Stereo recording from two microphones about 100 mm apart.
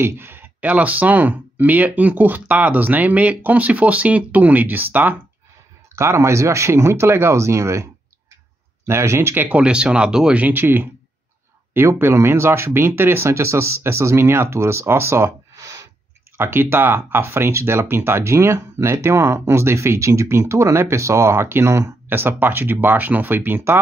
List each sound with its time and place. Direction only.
0.0 s speech: 20° right (ahead or behind)
16.3 s speech: 20° right (ahead or behind)